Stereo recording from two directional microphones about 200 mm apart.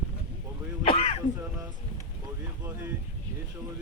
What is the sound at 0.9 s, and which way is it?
Throat clearing, 30° left (ahead or behind).